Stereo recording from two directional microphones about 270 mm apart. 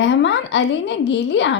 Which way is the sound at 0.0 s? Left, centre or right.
Left.